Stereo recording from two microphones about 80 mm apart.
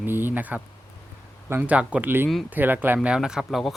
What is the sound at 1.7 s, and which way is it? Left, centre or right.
Speech, centre.